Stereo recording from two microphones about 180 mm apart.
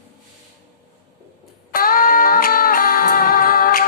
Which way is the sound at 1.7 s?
55° left (ahead or behind).